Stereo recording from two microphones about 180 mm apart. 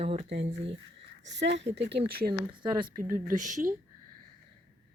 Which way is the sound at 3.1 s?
45° right (ahead or behind).